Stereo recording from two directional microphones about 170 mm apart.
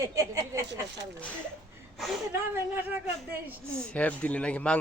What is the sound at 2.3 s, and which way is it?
Speech, 15° right (ahead or behind).